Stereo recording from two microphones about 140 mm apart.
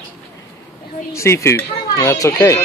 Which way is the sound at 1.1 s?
20° left (ahead or behind).